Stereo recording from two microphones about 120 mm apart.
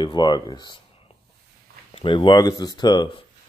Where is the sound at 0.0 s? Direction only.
35° left (ahead or behind).